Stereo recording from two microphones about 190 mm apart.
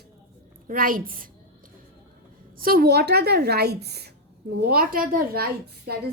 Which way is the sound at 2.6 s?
50° right (ahead or behind).